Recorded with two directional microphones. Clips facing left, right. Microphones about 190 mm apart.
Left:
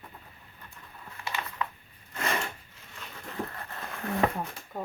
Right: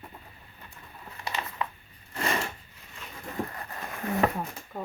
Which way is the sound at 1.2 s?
25° right (ahead or behind).